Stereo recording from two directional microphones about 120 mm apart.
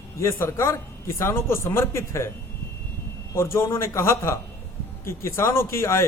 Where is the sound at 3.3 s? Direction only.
20° left (ahead or behind).